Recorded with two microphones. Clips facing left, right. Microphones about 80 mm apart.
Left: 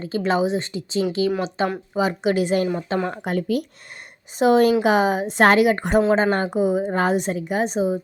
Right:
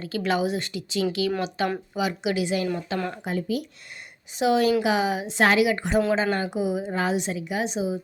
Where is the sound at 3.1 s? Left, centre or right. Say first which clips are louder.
Left 5 dB; left.